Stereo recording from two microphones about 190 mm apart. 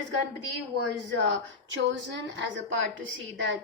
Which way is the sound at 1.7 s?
75° right (ahead or behind).